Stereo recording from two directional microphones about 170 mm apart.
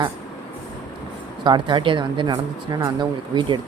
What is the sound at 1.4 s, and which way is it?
A woman's voice, 25° right (ahead or behind).